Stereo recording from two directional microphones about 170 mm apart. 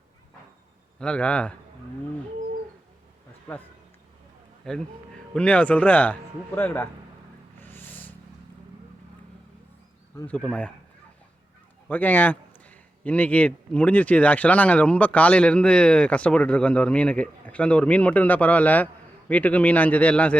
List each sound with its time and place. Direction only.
0.9 s a man's voice: 5° left (ahead or behind)
3.5 s a man's voice: 10° left (ahead or behind)
7.6 s a sound: 10° left (ahead or behind)
10.4 s speech: 5° left (ahead or behind)
11.9 s a man's voice: 10° left (ahead or behind)